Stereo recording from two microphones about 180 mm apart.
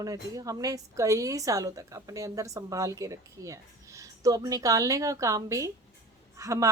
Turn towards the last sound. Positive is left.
turn(degrees=-15)  # may be behind; listen again after turning